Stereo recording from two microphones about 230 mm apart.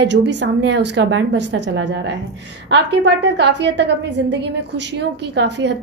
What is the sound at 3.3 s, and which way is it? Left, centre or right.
A woman's voice, right.